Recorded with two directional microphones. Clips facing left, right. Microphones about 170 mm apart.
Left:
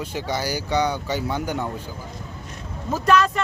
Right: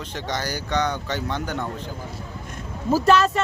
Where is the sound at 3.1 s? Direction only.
30° right (ahead or behind).